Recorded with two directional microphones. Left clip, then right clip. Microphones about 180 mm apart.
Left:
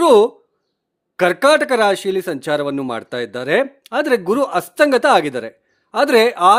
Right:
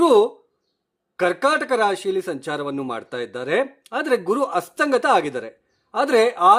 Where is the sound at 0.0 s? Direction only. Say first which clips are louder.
Left 4 dB; 35° left (ahead or behind).